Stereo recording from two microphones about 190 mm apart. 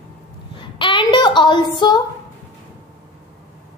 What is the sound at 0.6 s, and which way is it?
A woman's voice, 25° left (ahead or behind).